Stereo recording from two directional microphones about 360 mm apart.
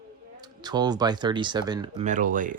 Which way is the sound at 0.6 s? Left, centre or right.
Centre.